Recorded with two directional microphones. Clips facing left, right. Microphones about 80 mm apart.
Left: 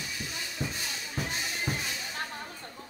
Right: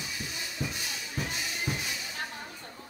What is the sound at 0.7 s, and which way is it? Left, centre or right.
Music, left.